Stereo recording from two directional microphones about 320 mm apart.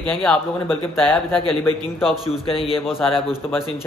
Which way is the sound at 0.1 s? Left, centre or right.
Centre.